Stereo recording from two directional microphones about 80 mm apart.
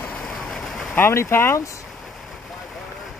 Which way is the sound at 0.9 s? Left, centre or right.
Left.